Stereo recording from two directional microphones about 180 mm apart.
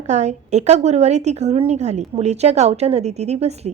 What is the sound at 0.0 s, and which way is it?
A woman's voice, 40° right (ahead or behind).